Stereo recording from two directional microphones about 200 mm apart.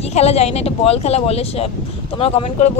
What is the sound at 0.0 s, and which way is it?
Speech, 30° left (ahead or behind).